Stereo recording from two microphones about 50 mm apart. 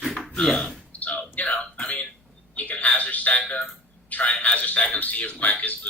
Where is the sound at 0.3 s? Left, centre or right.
Centre.